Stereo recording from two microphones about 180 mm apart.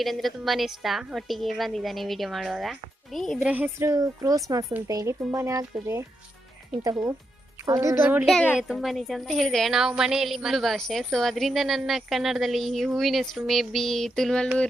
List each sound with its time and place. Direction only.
0.0 s a child's voice: centre (ahead or behind)
3.5 s a woman's voice: 15° right (ahead or behind)
8.3 s a child's voice: 5° left (ahead or behind)